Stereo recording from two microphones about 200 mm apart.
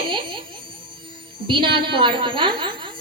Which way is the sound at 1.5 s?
25° right (ahead or behind).